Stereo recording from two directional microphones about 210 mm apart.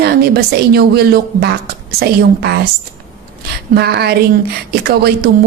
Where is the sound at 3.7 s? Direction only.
50° right (ahead or behind).